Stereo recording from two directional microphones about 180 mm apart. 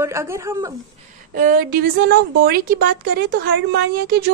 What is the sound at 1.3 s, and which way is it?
A woman's voice, 50° right (ahead or behind).